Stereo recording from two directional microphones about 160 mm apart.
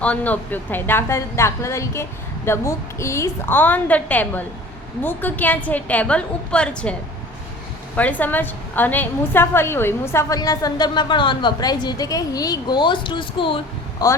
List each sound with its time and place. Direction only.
0.0 s speech: 10° left (ahead or behind)
7.9 s a woman's voice: 10° left (ahead or behind); by 14.2 s 25° left (ahead or behind)